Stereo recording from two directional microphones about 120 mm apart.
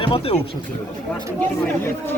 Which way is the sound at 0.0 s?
45° left (ahead or behind).